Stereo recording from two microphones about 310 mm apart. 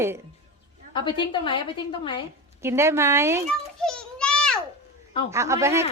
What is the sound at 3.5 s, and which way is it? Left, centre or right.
Children playing, centre.